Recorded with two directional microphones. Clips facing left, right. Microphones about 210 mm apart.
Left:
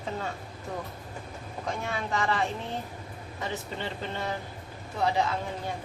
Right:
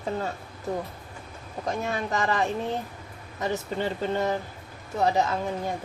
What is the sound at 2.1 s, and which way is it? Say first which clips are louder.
Speech: right 1 dB; 40° right (ahead or behind).